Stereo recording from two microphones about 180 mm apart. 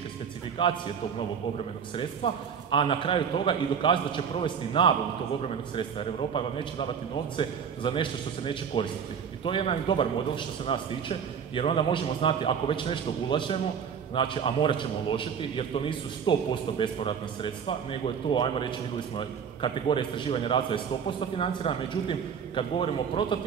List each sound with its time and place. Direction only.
0.6 s a man's voice: 25° left (ahead or behind)
2.0 s a man's voice: 30° left (ahead or behind)